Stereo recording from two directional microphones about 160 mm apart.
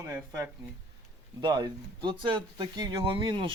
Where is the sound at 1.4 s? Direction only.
30° right (ahead or behind).